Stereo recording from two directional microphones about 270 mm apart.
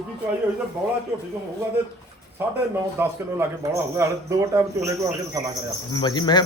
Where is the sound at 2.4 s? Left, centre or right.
Centre.